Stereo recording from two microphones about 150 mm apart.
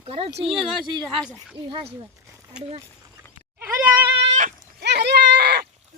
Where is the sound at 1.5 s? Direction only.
35° right (ahead or behind).